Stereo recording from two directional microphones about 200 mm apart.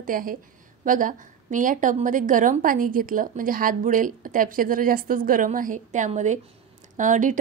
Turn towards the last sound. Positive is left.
turn(degrees=-40)  # may be behind; listen again after turning